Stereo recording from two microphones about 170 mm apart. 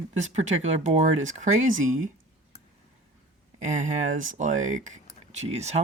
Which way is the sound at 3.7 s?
45° right (ahead or behind).